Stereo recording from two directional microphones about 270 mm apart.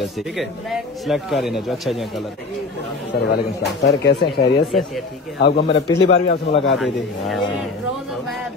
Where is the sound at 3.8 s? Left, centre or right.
Left.